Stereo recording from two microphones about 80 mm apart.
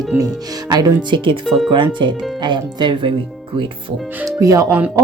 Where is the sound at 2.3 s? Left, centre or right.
Right.